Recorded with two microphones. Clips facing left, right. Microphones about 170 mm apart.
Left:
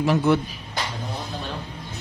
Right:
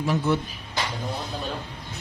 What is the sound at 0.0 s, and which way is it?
Speech, 85° left.